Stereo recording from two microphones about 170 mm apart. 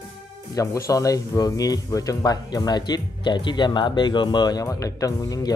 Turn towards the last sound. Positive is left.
turn(degrees=20)  # may be behind; listen again after turning